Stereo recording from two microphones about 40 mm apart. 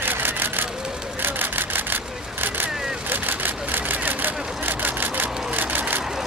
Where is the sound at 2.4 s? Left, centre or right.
Right.